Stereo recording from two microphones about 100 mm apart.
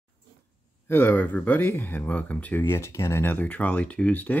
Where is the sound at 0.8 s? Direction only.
20° left (ahead or behind).